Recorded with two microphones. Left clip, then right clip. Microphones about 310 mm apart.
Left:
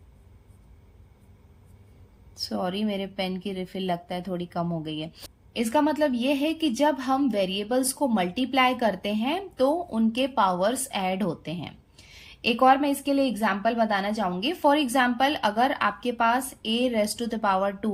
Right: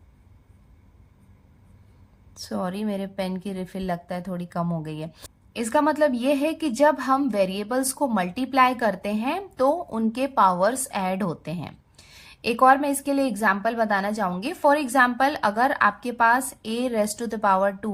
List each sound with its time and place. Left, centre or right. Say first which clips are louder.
2.3 s a woman's voice: left 1 dB; right